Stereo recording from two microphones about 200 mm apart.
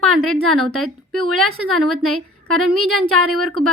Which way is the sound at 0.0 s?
90° right.